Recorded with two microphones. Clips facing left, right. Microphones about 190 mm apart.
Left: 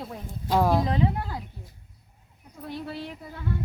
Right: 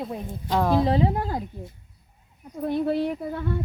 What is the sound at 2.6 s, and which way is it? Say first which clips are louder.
Speech: right 11 dB; 50° right (ahead or behind).